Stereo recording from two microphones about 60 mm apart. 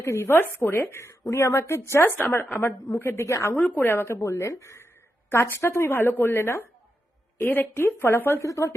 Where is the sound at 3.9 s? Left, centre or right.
Left.